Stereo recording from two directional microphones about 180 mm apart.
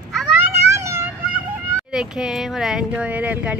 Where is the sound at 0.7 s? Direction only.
15° right (ahead or behind).